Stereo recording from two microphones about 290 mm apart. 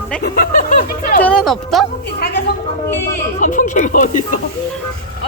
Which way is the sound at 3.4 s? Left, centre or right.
Left.